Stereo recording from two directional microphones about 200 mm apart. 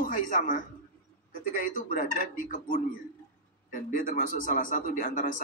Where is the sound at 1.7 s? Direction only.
45° left (ahead or behind).